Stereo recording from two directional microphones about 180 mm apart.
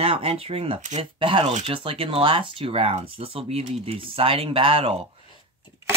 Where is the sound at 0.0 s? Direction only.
35° right (ahead or behind).